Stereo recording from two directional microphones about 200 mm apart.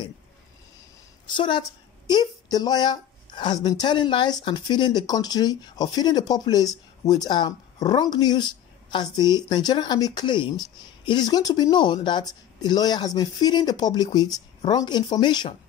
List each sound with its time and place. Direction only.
1.3 s speech: 25° left (ahead or behind)